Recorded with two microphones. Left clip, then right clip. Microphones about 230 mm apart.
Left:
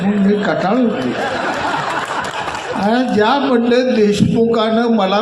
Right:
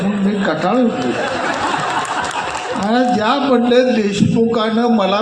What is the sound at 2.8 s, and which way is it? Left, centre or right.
A man's voice, left.